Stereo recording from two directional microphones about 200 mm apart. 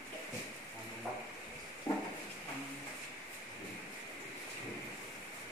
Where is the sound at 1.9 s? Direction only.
10° left (ahead or behind).